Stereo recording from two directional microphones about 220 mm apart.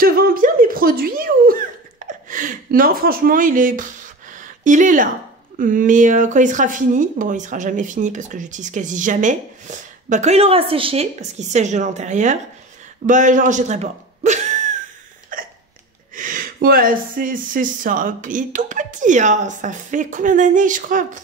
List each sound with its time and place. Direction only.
0.0 s a sound: 40° right (ahead or behind)
5.6 s speech: 40° right (ahead or behind)
15.3 s hiccup: 40° right (ahead or behind)
16.2 s speech: 40° right (ahead or behind)